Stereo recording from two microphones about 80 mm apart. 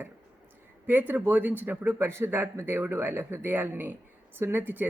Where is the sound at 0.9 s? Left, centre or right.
Right.